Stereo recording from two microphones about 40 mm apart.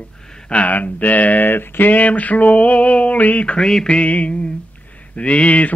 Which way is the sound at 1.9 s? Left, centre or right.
Left.